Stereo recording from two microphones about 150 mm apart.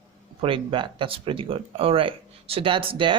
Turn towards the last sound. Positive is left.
turn(degrees=-35)  # may be behind; listen again after turning